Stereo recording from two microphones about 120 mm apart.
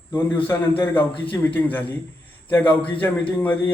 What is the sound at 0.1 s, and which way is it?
A man's voice, 15° left (ahead or behind).